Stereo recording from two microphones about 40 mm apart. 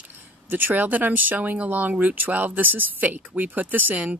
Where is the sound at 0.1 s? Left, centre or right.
Right.